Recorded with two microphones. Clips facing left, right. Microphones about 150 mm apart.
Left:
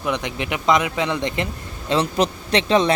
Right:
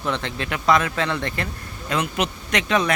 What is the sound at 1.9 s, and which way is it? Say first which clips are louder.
Speech: left 5 dB; 35° left (ahead or behind).